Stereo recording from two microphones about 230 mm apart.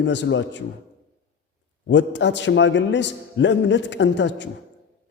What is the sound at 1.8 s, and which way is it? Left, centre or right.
A man's voice, left.